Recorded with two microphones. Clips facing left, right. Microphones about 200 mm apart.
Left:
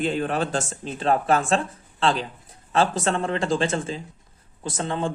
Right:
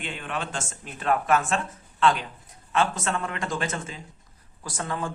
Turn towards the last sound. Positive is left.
turn(degrees=25)  # may be behind; listen again after turning